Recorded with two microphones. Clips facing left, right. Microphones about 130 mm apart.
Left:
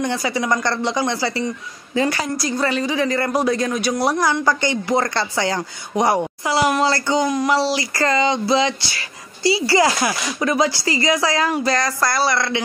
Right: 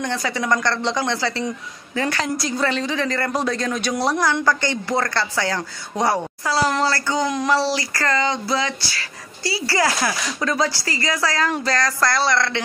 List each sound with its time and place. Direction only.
0.0 s speech: 10° left (ahead or behind)